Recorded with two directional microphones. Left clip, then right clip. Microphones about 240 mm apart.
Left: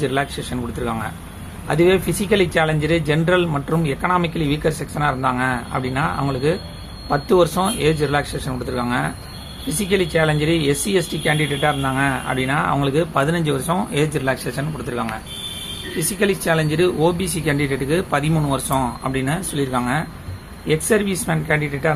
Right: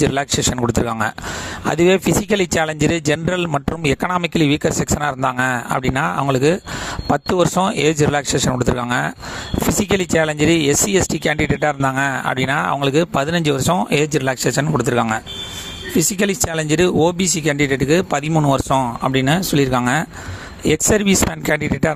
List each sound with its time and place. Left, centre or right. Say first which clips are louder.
0.0 s speech: right 4 dB; right